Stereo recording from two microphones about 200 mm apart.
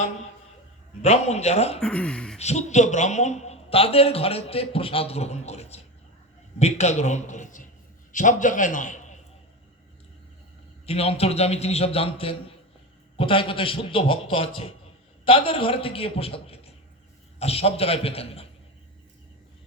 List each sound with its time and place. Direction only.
1.0 s a man's voice: 35° left (ahead or behind)
1.8 s speech: 5° left (ahead or behind)
2.4 s a man's voice: 35° left (ahead or behind)
10.8 s a man's voice: 30° left (ahead or behind)